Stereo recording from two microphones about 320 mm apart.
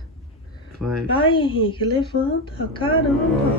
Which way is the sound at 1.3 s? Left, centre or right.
Centre.